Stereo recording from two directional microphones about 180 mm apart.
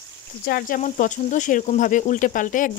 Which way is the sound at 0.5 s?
50° left (ahead or behind).